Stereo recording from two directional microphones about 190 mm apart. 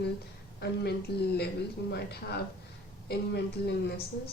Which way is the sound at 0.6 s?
60° left (ahead or behind).